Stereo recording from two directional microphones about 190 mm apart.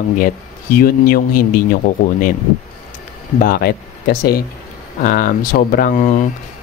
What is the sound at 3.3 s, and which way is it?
Speech, 50° left (ahead or behind).